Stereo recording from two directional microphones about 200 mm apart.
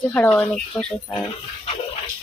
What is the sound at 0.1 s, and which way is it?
Speech, 5° left (ahead or behind).